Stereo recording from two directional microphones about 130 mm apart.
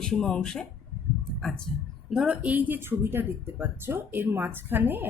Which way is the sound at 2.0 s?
5° right (ahead or behind).